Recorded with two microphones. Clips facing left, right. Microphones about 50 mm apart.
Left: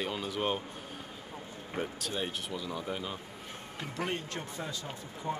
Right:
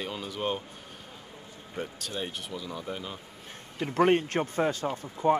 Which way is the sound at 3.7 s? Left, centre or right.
Right.